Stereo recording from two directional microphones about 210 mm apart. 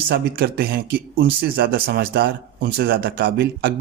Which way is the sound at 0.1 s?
45° right (ahead or behind).